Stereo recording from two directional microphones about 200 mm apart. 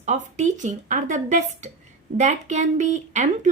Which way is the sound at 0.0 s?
35° right (ahead or behind).